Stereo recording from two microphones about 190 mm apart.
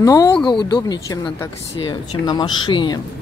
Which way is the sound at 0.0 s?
20° left (ahead or behind).